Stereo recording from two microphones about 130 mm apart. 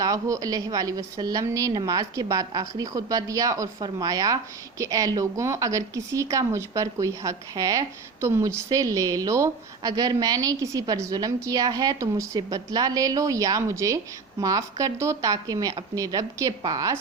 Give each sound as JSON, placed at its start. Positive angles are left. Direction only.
{"t": 0.0, "sound": "a woman's voice", "side_deg": -25}